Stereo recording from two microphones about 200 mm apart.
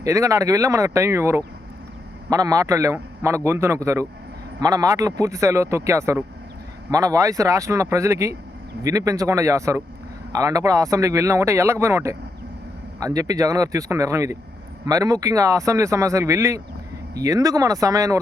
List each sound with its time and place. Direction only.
0.0 s speech: 15° right (ahead or behind)